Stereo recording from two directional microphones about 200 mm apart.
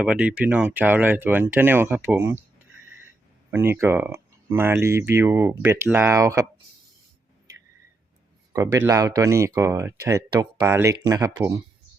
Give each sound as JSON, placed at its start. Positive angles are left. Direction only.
{"t": 0.0, "sound": "speech", "side_deg": -5}
{"t": 3.5, "sound": "speech", "side_deg": -10}
{"t": 8.5, "sound": "speech", "side_deg": -15}